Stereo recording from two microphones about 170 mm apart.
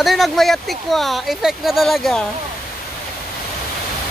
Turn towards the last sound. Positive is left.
turn(degrees=0)  # may be behind; listen again after turning